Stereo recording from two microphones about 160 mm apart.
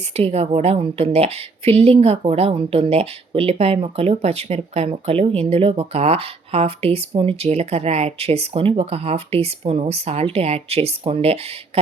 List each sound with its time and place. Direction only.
0.1 s a woman's voice: 40° right (ahead or behind)